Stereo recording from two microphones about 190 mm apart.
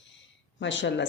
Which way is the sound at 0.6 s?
70° left (ahead or behind).